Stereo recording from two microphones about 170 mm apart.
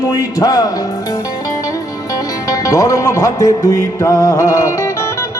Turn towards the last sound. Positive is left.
turn(degrees=15)  # may be behind; listen again after turning